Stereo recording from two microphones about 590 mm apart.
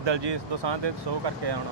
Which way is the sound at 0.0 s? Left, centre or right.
Right.